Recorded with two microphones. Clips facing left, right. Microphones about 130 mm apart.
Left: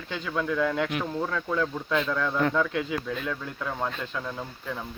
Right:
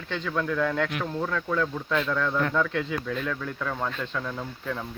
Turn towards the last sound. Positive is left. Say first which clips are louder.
# right 2 dB
turn(degrees=10)  # may be behind; listen again after turning